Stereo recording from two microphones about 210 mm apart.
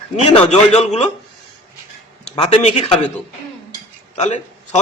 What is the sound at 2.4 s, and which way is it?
Speech, 30° left (ahead or behind).